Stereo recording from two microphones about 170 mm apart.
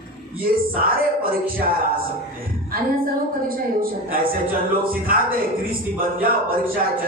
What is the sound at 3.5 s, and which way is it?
Speech, 60° right (ahead or behind).